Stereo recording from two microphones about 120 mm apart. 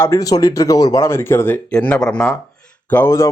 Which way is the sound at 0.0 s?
25° left (ahead or behind).